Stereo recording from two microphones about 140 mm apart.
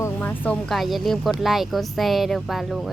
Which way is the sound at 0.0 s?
10° left (ahead or behind).